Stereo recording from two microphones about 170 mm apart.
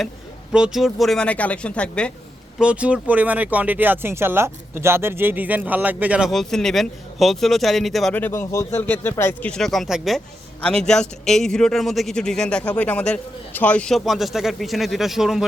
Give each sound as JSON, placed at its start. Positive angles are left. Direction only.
{"t": 0.5, "sound": "speech", "side_deg": -5}
{"t": 2.6, "sound": "speech", "side_deg": -5}